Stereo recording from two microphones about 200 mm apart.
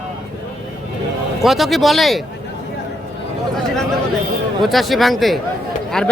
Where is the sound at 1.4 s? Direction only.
Centre (ahead or behind).